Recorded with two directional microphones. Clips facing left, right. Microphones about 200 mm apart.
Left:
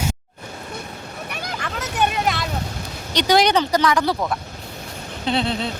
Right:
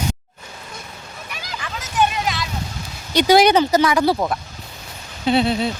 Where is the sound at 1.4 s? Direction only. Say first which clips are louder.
Left 3 dB; 55° left (ahead or behind).